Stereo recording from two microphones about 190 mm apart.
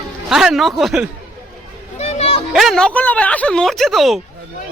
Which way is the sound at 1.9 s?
35° left (ahead or behind).